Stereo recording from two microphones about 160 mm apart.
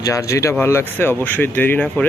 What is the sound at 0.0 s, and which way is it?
Speech, 20° left (ahead or behind).